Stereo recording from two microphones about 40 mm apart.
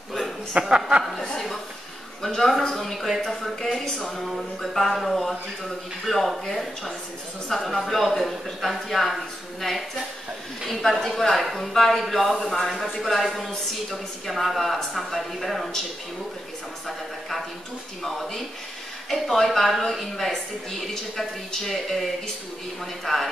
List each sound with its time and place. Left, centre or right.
0.5 s speech: right
2.2 s a man's voice: centre
18.0 s a man's voice: centre
23.1 s a man's voice: centre